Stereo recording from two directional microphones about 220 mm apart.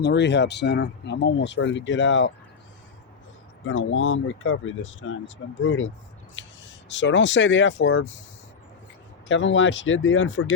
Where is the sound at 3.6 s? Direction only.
60° left (ahead or behind).